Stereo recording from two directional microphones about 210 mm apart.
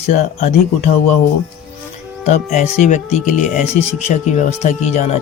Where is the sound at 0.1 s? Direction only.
35° left (ahead or behind).